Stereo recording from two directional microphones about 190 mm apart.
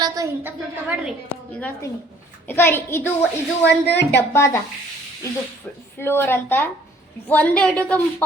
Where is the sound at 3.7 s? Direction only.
60° left (ahead or behind).